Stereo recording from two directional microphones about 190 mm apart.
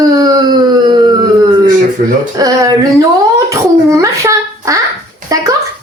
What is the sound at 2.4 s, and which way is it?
Speech, 15° right (ahead or behind).